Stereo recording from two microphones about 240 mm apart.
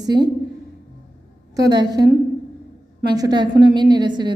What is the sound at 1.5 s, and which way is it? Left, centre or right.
A woman's voice, centre.